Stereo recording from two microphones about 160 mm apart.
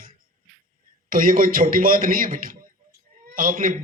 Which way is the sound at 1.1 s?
60° right (ahead or behind).